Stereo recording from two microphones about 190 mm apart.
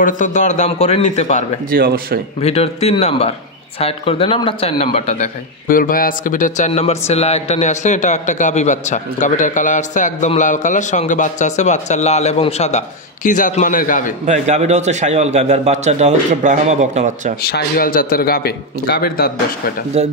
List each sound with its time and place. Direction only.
0.0 s a man's voice: 40° left (ahead or behind)
1.7 s speech: 50° right (ahead or behind)
2.4 s a man's voice: 35° left (ahead or behind)
14.2 s a man's voice: 35° right (ahead or behind)
17.4 s a man's voice: 55° left (ahead or behind)
19.9 s a man's voice: 35° right (ahead or behind)